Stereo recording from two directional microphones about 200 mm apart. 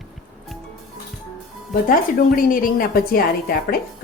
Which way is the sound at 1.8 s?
45° left (ahead or behind).